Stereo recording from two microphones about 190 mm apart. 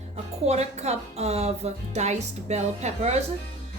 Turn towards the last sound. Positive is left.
turn(degrees=-35)  # may be behind; listen again after turning